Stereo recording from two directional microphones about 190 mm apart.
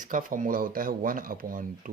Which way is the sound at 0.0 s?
45° right (ahead or behind).